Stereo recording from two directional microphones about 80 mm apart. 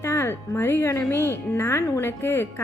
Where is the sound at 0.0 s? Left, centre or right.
Left.